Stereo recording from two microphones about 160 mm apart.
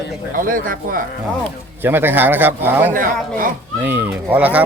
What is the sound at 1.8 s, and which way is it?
A man's voice, 15° right (ahead or behind).